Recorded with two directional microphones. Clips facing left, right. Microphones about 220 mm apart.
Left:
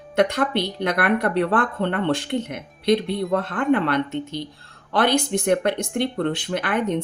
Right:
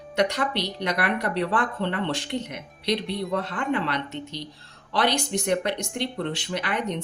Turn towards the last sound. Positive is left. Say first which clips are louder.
# left 5 dB
turn(degrees=50)  # may be behind; listen again after turning